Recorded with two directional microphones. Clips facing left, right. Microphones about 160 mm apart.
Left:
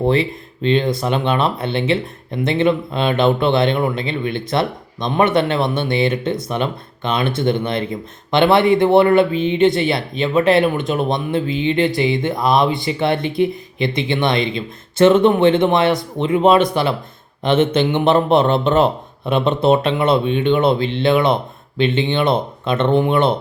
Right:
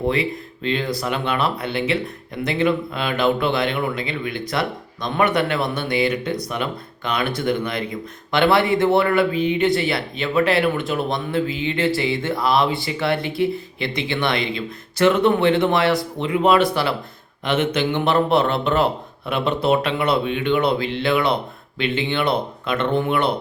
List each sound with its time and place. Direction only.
0.1 s speech: 25° left (ahead or behind)